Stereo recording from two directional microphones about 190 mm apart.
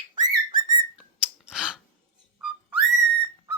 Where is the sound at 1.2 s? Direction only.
5° right (ahead or behind).